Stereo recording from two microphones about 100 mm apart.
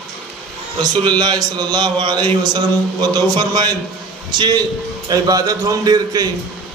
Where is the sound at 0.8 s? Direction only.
45° right (ahead or behind).